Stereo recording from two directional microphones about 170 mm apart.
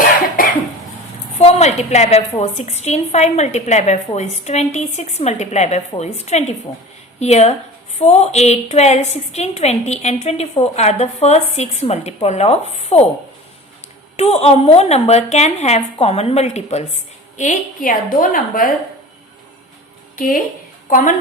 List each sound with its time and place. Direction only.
0.4 s cough: 55° left (ahead or behind)
1.4 s a woman's voice: 40° left (ahead or behind)
14.2 s a woman's voice: 35° left (ahead or behind); by 18.7 s 55° left (ahead or behind)
20.1 s speech: 55° left (ahead or behind)